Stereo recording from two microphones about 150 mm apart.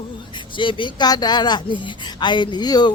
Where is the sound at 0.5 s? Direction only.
35° left (ahead or behind).